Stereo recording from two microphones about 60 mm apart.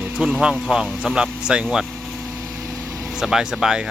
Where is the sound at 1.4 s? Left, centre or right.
Centre.